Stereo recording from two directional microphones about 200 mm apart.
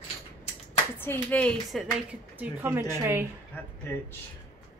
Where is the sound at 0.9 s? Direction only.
10° left (ahead or behind).